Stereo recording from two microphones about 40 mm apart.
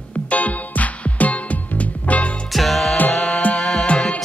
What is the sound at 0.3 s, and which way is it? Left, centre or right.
Music, left.